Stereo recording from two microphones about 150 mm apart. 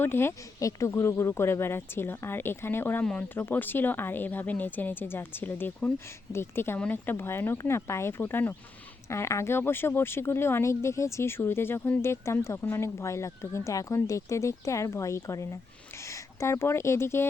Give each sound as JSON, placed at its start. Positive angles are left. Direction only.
{"t": 0.0, "sound": "speech", "side_deg": 15}